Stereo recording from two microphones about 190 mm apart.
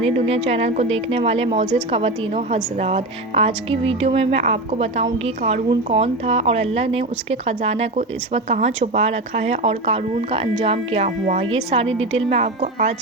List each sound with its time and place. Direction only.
0.0 s speech: 30° right (ahead or behind)